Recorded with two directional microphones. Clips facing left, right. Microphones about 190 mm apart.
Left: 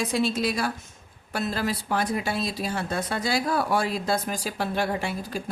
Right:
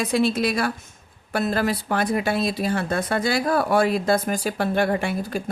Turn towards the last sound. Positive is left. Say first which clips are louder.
# right 5 dB
turn(degrees=-55)  # may be behind; listen again after turning